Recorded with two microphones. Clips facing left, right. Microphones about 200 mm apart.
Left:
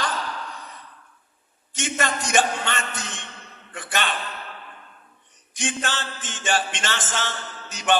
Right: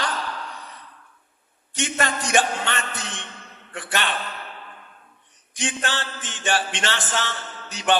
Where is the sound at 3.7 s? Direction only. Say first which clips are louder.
Even; 50° left (ahead or behind).